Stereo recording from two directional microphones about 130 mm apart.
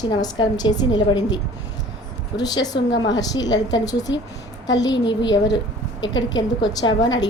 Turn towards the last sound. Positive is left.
turn(degrees=30)  # may be behind; listen again after turning